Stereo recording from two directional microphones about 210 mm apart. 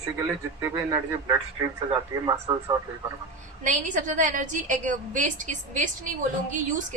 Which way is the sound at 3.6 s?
35° right (ahead or behind).